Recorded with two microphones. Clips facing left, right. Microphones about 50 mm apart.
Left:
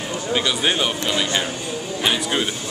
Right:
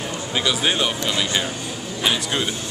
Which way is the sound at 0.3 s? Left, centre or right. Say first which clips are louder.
Left 1 dB; centre.